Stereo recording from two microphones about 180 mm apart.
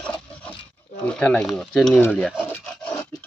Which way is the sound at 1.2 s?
5° left (ahead or behind).